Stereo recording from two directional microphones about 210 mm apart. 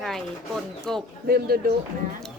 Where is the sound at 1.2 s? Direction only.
45° right (ahead or behind).